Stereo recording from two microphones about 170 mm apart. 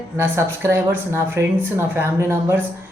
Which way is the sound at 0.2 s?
15° right (ahead or behind).